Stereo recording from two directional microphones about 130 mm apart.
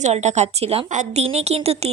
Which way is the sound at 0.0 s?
60° right (ahead or behind).